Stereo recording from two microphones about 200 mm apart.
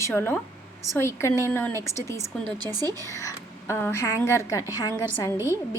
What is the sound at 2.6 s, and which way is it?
Speech, 20° right (ahead or behind).